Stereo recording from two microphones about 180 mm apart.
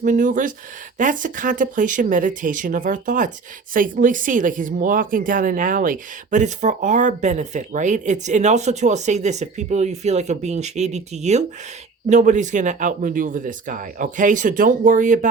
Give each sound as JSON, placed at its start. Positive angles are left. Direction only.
{"t": 0.0, "sound": "speech", "side_deg": -45}